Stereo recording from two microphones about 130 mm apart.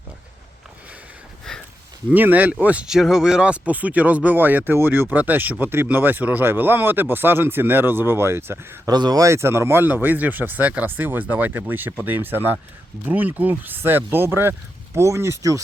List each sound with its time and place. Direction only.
1.5 s a sound: 5° left (ahead or behind)
2.0 s speech: 15° right (ahead or behind)
8.9 s speech: 30° right (ahead or behind)